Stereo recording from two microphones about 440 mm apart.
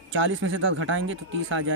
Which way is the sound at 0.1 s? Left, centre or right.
Right.